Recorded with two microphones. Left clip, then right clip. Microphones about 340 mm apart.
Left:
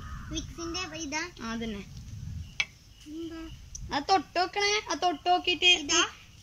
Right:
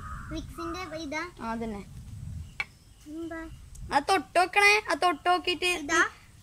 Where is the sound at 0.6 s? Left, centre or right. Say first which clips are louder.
Right 1 dB; right.